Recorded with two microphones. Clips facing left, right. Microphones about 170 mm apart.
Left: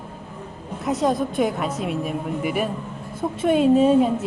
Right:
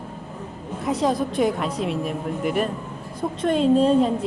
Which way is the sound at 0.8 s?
Centre (ahead or behind).